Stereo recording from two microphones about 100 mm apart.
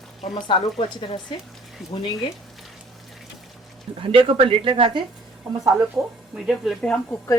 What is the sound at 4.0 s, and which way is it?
Speech, 65° right (ahead or behind).